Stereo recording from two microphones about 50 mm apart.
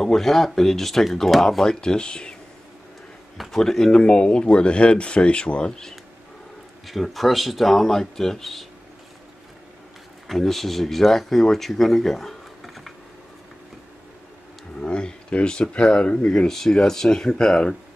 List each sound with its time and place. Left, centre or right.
0.0 s speech: centre
3.3 s speech: centre
6.9 s speech: centre
10.2 s speech: centre
14.8 s speech: left